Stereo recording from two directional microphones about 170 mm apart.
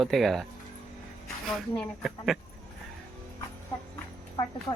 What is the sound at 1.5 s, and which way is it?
Speech, centre (ahead or behind).